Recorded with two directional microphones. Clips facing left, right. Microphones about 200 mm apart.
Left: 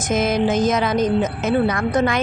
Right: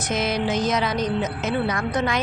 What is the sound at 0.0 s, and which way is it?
Speech, 50° left (ahead or behind).